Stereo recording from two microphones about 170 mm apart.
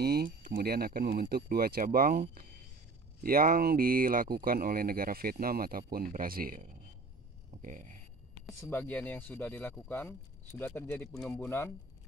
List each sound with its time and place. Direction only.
0.0 s speech: 65° right (ahead or behind); by 8.0 s 50° right (ahead or behind)
8.5 s speech: 10° left (ahead or behind)